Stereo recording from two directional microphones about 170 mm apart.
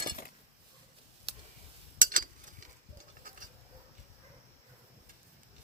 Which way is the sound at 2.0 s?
55° right (ahead or behind).